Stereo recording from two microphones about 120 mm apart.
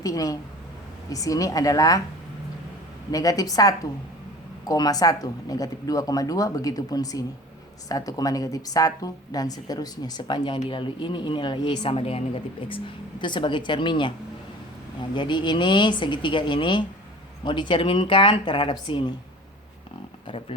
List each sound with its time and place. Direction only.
0.0 s a woman's voice: 30° left (ahead or behind)
3.1 s speech: 30° left (ahead or behind)
15.1 s speech: 40° left (ahead or behind)